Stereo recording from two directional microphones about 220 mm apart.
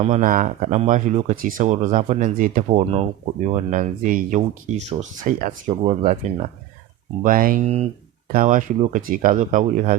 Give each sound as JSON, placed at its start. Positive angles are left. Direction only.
{"t": 0.0, "sound": "speech", "side_deg": -35}